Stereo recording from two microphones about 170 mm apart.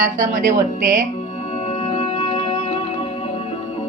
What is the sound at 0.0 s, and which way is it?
A woman's voice, 50° right (ahead or behind).